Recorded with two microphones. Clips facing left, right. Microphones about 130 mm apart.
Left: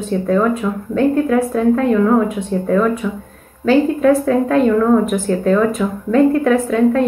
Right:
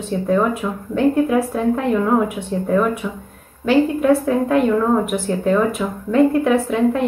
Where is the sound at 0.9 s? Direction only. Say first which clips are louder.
Left 1 dB; 15° right (ahead or behind).